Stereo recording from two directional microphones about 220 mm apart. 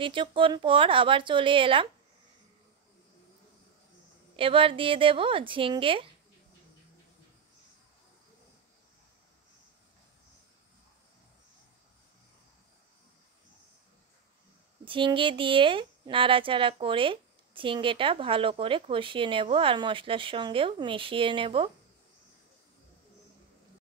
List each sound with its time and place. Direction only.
0.0 s speech: 25° right (ahead or behind)
4.4 s speech: 25° right (ahead or behind)
14.9 s speech: 25° right (ahead or behind)